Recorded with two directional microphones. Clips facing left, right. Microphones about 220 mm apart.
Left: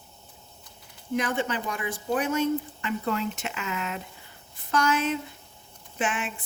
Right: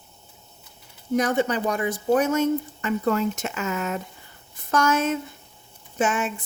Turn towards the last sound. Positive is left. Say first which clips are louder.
# right 6 dB
turn(degrees=-40)  # may be behind; listen again after turning